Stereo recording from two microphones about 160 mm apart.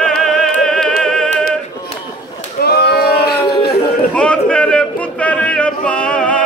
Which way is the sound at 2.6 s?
85° left.